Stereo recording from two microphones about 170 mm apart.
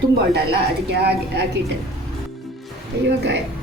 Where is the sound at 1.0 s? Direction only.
75° right (ahead or behind).